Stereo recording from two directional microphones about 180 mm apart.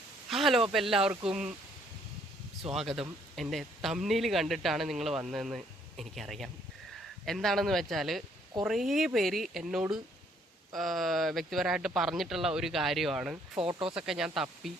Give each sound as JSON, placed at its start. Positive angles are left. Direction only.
{"t": 0.3, "sound": "a sound", "side_deg": 0}
{"t": 0.7, "sound": "speech", "side_deg": 0}
{"t": 2.7, "sound": "speech", "side_deg": 0}
{"t": 13.6, "sound": "speech", "side_deg": -30}
{"t": 13.9, "sound": "speech", "side_deg": -5}